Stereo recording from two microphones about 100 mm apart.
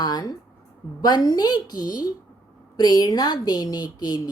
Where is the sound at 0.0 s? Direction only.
40° left (ahead or behind).